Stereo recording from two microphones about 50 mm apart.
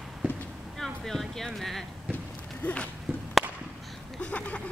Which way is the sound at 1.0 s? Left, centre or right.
Centre.